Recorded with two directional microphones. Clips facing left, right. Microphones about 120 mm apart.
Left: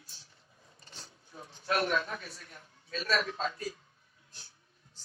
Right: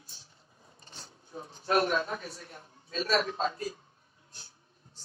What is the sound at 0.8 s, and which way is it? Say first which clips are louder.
Speech: right 2 dB; 30° right (ahead or behind).